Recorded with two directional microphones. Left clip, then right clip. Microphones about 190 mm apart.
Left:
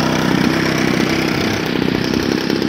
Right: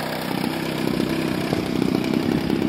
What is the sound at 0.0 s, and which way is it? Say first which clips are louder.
Vehicle: left 10 dB; 25° right (ahead or behind).